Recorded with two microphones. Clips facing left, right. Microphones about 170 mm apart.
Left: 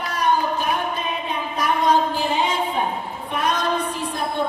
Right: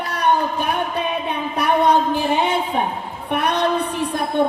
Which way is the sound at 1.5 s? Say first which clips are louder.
Right 3 dB; 65° right (ahead or behind).